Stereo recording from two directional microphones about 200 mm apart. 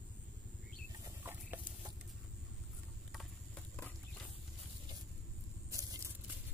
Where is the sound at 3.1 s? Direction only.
5° left (ahead or behind).